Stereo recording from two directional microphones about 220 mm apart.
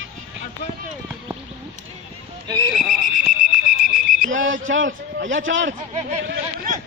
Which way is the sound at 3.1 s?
35° left (ahead or behind).